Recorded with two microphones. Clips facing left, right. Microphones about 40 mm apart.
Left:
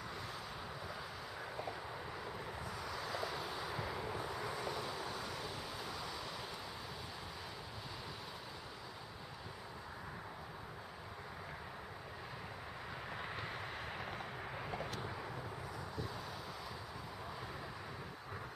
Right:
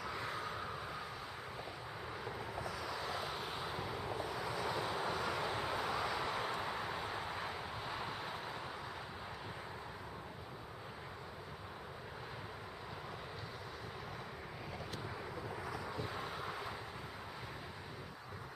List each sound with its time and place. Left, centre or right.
3.1 s vehicle: right
3.9 s vehicle: centre
4.6 s vehicle: right